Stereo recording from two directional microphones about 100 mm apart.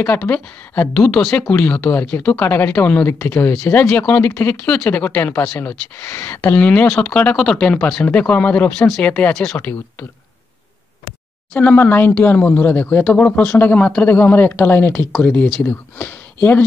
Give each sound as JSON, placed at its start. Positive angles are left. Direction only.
{"t": 0.0, "sound": "speech", "side_deg": 15}
{"t": 1.5, "sound": "speech", "side_deg": 20}
{"t": 3.8, "sound": "speech", "side_deg": 10}
{"t": 11.5, "sound": "speech", "side_deg": 15}